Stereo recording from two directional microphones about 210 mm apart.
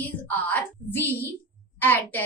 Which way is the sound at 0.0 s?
5° left (ahead or behind).